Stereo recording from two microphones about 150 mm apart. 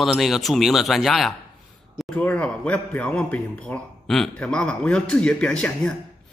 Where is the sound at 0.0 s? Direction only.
Centre (ahead or behind).